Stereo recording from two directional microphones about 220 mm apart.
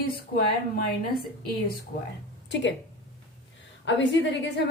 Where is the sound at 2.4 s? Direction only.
55° left (ahead or behind).